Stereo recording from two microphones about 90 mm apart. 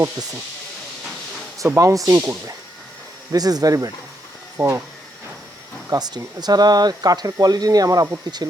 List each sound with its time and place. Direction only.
1.5 s speech: 35° right (ahead or behind)
4.5 s speech: 30° right (ahead or behind)
5.9 s speech: 45° right (ahead or behind)